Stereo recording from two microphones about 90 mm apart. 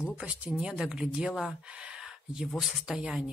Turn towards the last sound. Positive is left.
turn(degrees=-5)  # may be behind; listen again after turning